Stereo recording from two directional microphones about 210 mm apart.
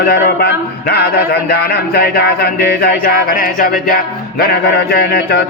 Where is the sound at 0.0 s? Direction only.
50° left (ahead or behind).